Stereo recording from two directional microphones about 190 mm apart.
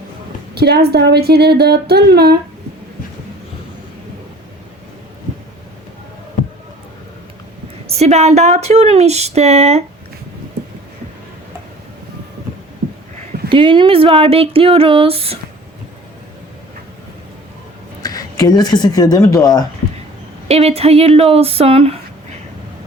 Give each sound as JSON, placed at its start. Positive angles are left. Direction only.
{"t": 0.5, "sound": "speech", "side_deg": -60}
{"t": 7.9, "sound": "speech", "side_deg": -35}
{"t": 13.5, "sound": "speech", "side_deg": -25}
{"t": 18.0, "sound": "speech", "side_deg": 20}
{"t": 20.5, "sound": "speech", "side_deg": -30}